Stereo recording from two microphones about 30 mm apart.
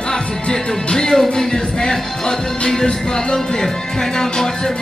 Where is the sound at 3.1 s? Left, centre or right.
Centre.